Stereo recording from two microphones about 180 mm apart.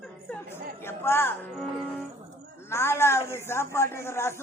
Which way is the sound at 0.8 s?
15° left (ahead or behind).